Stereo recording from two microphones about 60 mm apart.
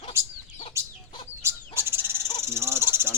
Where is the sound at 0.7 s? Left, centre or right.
Right.